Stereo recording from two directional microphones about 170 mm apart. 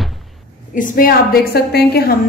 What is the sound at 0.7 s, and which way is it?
A woman's voice, 55° left (ahead or behind).